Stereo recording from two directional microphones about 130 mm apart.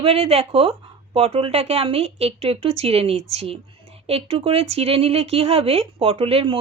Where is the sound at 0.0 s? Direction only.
50° right (ahead or behind).